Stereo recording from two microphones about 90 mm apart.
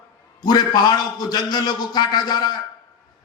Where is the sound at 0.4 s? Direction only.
50° left (ahead or behind).